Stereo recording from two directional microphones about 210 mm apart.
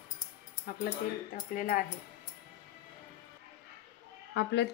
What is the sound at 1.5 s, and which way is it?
Speech, 45° left (ahead or behind).